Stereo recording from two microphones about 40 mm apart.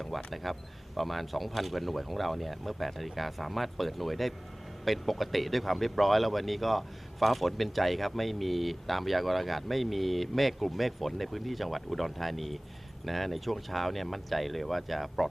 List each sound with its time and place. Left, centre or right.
0.1 s speech: centre